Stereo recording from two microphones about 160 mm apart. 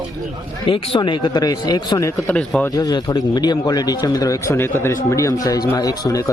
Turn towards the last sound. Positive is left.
turn(degrees=20)  # may be behind; listen again after turning